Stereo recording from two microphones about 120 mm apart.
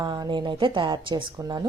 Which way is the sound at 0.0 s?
35° right (ahead or behind).